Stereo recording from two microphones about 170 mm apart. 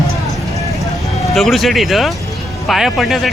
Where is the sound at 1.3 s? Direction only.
Centre (ahead or behind).